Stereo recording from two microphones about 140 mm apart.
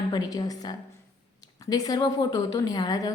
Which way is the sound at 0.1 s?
25° left (ahead or behind).